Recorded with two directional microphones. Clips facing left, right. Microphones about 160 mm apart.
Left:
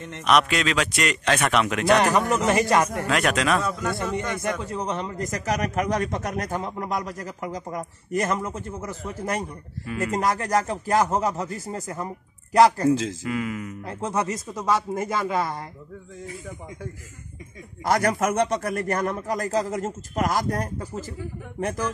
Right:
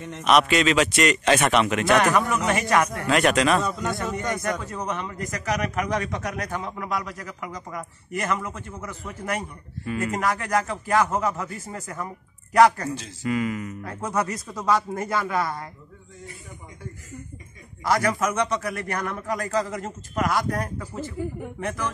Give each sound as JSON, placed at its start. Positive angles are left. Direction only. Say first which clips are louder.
{"t": 0.0, "sound": "a man's voice", "louder": "right 1 dB", "side_deg": 0}
{"t": 2.0, "sound": "a man's voice", "louder": "left 1 dB", "side_deg": 30}
{"t": 3.1, "sound": "a man's voice", "louder": "right 2 dB", "side_deg": 0}
{"t": 4.6, "sound": "a man's voice", "louder": "left 2 dB", "side_deg": 30}
{"t": 13.2, "sound": "a man's voice", "louder": "right 2 dB", "side_deg": 0}
{"t": 13.8, "sound": "speech", "louder": "left 1 dB", "side_deg": 25}
{"t": 17.8, "sound": "a man's voice", "louder": "left 1 dB", "side_deg": 50}